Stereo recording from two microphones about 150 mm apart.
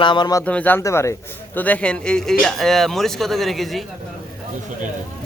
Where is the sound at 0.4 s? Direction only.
10° left (ahead or behind).